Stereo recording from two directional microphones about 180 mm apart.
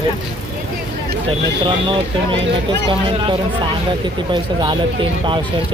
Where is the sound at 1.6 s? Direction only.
30° right (ahead or behind).